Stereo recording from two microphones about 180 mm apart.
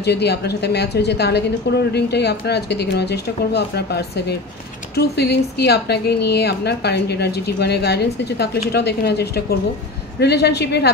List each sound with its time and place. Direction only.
0.0 s a woman's voice: 65° left (ahead or behind)